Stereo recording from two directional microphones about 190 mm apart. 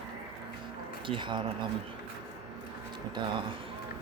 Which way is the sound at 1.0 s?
25° right (ahead or behind).